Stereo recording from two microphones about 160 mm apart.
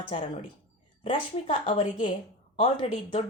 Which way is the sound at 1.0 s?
35° left (ahead or behind).